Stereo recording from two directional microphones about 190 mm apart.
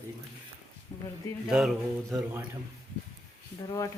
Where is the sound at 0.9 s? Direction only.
15° left (ahead or behind).